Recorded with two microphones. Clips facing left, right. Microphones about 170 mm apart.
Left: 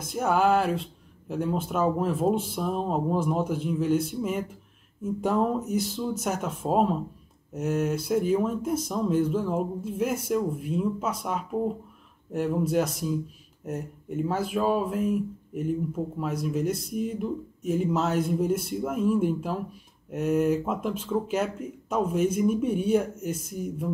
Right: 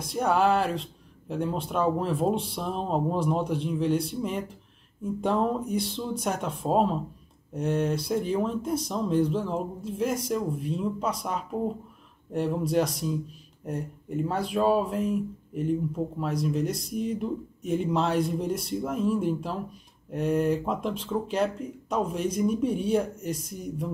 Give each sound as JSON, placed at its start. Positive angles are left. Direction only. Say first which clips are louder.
{"t": 0.1, "sound": "speech", "louder": "even", "side_deg": 5}